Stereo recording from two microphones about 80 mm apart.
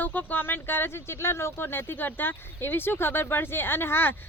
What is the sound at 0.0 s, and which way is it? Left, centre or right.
Speech, left.